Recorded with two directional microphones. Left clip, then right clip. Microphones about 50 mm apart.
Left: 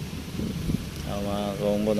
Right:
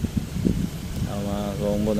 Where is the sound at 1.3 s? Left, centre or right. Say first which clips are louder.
Even; right.